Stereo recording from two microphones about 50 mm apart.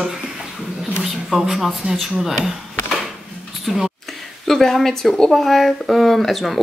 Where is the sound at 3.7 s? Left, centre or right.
Centre.